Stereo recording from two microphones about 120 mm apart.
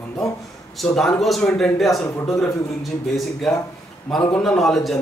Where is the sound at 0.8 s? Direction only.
5° left (ahead or behind).